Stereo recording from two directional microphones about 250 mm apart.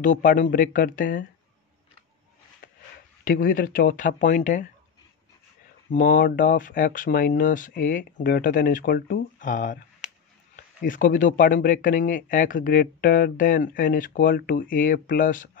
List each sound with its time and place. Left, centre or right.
0.0 s speech: left
3.3 s speech: left
5.9 s speech: left